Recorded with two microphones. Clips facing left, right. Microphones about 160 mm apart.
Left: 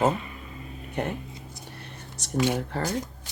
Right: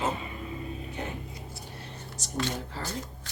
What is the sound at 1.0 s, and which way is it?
Speech, 65° left (ahead or behind).